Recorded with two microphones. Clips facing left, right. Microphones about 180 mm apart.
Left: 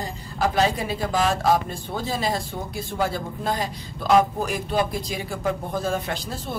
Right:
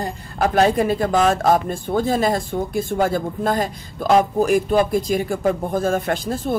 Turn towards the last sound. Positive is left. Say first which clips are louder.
# right 9 dB
turn(degrees=-50)  # may be behind; listen again after turning